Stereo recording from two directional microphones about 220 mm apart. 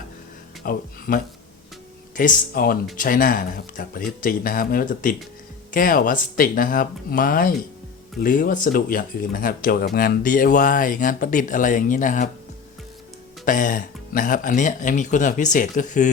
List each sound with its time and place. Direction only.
0.6 s speech: 40° left (ahead or behind)
13.4 s speech: 35° left (ahead or behind)